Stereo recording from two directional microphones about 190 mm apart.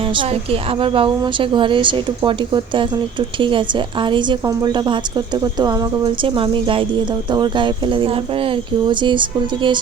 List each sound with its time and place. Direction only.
0.1 s a woman's voice: 30° right (ahead or behind)